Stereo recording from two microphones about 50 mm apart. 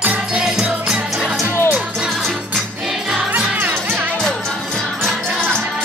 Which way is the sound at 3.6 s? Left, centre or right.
Right.